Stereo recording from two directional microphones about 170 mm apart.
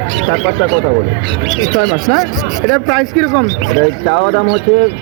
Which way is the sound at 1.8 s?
Centre (ahead or behind).